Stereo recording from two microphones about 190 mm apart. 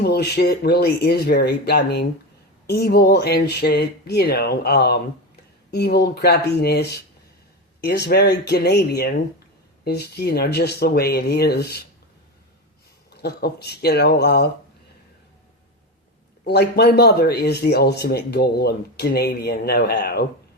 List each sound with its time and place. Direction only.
0.0 s speech: 60° left (ahead or behind)
13.2 s speech: 60° left (ahead or behind)
16.5 s speech: 60° left (ahead or behind)